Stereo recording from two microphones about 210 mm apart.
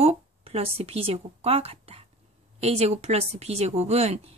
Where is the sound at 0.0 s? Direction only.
30° right (ahead or behind).